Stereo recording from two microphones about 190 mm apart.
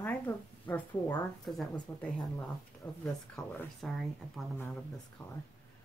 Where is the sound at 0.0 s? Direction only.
10° left (ahead or behind).